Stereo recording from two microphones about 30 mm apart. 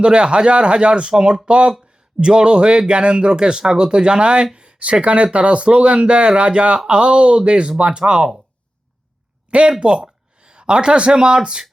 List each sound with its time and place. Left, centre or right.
0.0 s speech: right
4.5 s a sound: right
4.9 s speech: right
9.5 s speech: right